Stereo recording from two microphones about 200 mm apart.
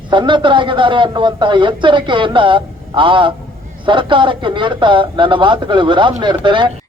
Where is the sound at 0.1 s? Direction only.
25° right (ahead or behind).